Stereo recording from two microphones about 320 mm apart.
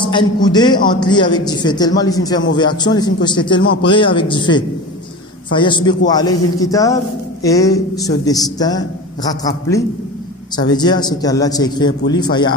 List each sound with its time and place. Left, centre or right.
0.0 s a man's voice: centre